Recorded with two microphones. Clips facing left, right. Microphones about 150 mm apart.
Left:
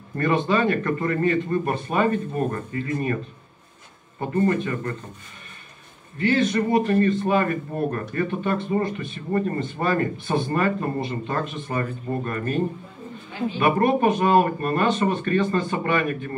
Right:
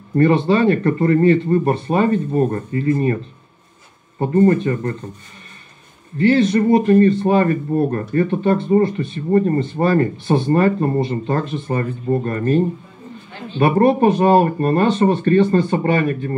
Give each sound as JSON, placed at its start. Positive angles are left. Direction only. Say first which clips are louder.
{"t": 0.2, "sound": "speech", "louder": "right 7 dB", "side_deg": -35}
{"t": 4.2, "sound": "speech", "louder": "right 8 dB", "side_deg": -40}
{"t": 6.1, "sound": "speech", "louder": "right 7 dB", "side_deg": -35}
{"t": 13.6, "sound": "speech", "louder": "right 6 dB", "side_deg": -35}